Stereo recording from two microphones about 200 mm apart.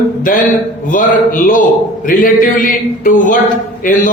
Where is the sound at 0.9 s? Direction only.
40° left (ahead or behind).